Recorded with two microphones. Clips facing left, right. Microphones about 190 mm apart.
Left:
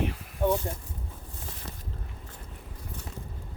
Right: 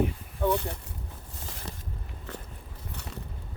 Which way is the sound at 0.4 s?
15° left (ahead or behind).